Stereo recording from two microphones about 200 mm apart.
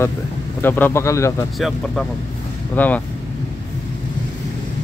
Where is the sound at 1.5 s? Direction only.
Centre (ahead or behind).